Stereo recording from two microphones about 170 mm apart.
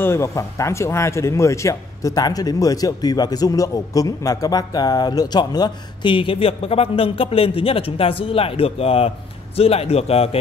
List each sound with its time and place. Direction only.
0.0 s speech: 15° left (ahead or behind); by 10.3 s 35° left (ahead or behind)